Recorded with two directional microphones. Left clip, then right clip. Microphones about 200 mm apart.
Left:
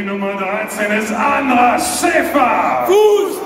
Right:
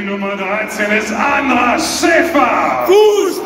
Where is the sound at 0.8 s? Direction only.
5° left (ahead or behind).